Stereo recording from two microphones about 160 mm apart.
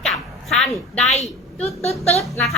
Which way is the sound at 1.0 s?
40° left (ahead or behind).